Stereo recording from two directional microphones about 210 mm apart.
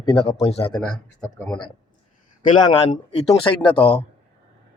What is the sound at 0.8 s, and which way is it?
Speech, 5° left (ahead or behind).